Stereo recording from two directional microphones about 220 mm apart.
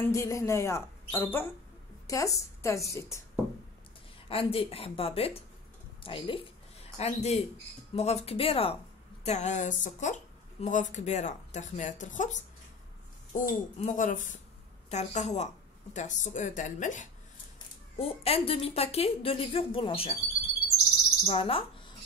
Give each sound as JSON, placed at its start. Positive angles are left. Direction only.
{"t": 0.0, "sound": "a woman's voice", "side_deg": 15}
{"t": 4.3, "sound": "a woman's voice", "side_deg": 25}
{"t": 21.3, "sound": "a woman's voice", "side_deg": 25}